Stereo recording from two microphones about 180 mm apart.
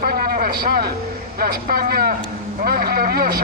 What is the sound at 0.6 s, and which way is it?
A man's voice, 55° right (ahead or behind).